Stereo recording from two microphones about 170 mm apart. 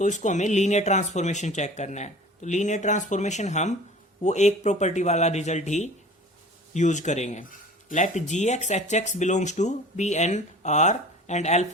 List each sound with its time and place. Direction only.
0.0 s speech: 45° left (ahead or behind)